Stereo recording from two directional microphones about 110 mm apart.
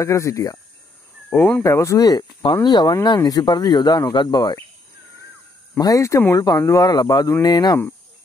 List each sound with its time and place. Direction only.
0.0 s speech: 25° left (ahead or behind)
1.6 s speech: 25° left (ahead or behind)
5.8 s speech: 30° left (ahead or behind)